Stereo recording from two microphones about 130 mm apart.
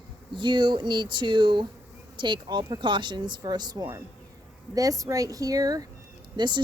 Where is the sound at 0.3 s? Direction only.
35° right (ahead or behind).